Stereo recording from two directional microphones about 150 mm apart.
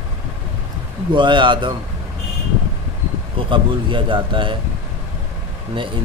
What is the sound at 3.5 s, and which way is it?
A man's voice, 35° right (ahead or behind).